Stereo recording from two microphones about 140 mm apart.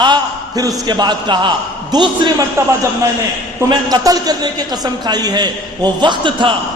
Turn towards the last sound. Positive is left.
turn(degrees=-35)  # may be behind; listen again after turning